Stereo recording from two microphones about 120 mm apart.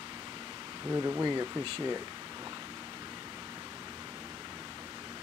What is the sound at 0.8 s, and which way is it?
Speech, 30° right (ahead or behind).